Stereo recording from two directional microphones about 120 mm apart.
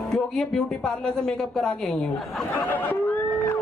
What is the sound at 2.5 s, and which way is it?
Speech, 15° left (ahead or behind).